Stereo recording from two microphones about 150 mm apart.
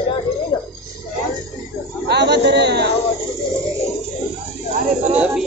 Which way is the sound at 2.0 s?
90° right.